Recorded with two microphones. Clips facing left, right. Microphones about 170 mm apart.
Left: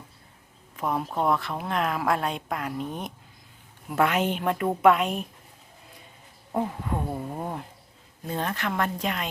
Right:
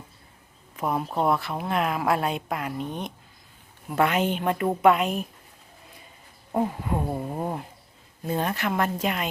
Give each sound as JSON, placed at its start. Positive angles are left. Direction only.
{"t": 0.8, "sound": "a woman's voice", "side_deg": -10}
{"t": 6.5, "sound": "speech", "side_deg": -10}